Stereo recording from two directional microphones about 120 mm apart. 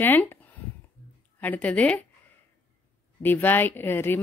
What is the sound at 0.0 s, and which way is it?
Speech, 15° left (ahead or behind).